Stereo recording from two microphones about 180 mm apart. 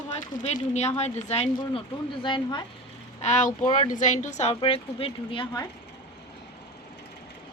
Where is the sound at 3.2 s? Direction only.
40° left (ahead or behind).